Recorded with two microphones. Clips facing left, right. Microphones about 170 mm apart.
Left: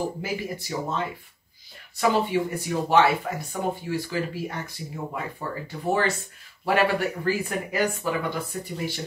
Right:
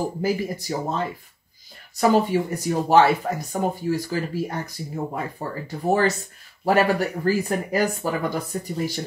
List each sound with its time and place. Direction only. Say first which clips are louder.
0.2 s speech: right 6 dB; 40° right (ahead or behind)